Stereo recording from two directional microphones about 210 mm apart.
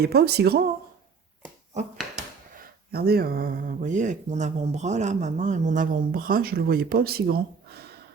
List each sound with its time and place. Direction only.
0.0 s speech: 50° right (ahead or behind)
2.9 s speech: 45° right (ahead or behind)